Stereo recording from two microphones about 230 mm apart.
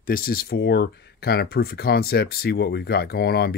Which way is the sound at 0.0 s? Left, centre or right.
Left.